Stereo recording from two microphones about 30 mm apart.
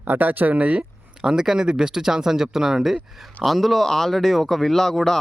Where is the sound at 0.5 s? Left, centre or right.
Right.